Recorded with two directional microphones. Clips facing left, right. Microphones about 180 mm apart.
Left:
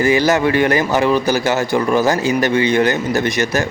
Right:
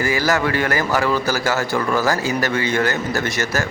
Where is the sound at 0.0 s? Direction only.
20° left (ahead or behind).